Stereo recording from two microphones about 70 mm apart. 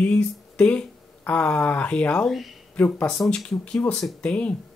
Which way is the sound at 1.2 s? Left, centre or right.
Centre.